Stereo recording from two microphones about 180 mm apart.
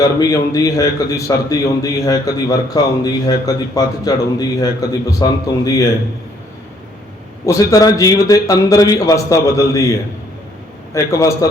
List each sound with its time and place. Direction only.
0.0 s a man's voice: 20° left (ahead or behind)
7.4 s a man's voice: 15° left (ahead or behind)